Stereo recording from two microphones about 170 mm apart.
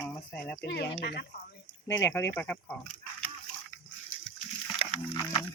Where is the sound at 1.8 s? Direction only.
20° left (ahead or behind).